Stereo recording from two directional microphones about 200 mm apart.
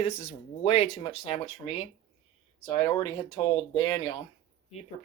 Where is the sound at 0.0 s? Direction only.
30° left (ahead or behind).